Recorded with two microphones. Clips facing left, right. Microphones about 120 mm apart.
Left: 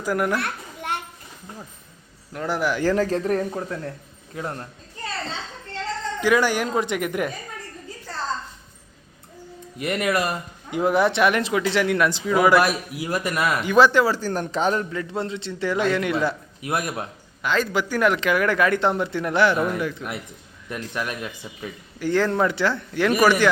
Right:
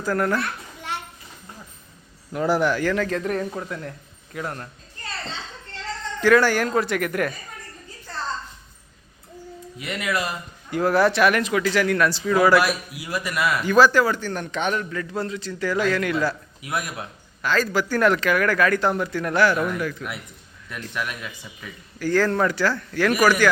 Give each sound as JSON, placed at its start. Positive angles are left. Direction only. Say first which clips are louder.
{"t": 0.0, "sound": "a woman's voice", "louder": "even", "side_deg": 15}
{"t": 2.3, "sound": "speech", "louder": "right 5 dB", "side_deg": -5}
{"t": 2.8, "sound": "a man's voice", "louder": "left 2 dB", "side_deg": 35}
{"t": 6.1, "sound": "a woman's voice", "louder": "right 3 dB", "side_deg": 15}
{"t": 9.7, "sound": "a man's voice", "louder": "left 4 dB", "side_deg": 50}
{"t": 10.7, "sound": "speech", "louder": "right 1 dB", "side_deg": 20}
{"t": 12.6, "sound": "a man's voice", "louder": "left 2 dB", "side_deg": 45}
{"t": 13.6, "sound": "speech", "louder": "even", "side_deg": 20}
{"t": 16.6, "sound": "a man's voice", "louder": "left 3 dB", "side_deg": 35}
{"t": 17.4, "sound": "a man's voice", "louder": "even", "side_deg": 20}
{"t": 21.9, "sound": "speech", "louder": "even", "side_deg": 20}